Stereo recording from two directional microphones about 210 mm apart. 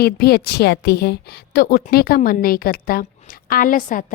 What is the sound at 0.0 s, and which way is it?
A woman's voice, 50° left (ahead or behind).